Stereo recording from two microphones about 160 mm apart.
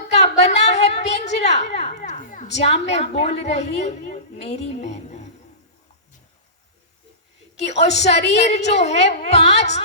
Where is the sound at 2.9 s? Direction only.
40° left (ahead or behind).